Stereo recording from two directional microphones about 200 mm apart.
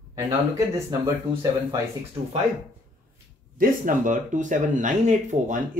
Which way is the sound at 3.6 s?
40° right (ahead or behind).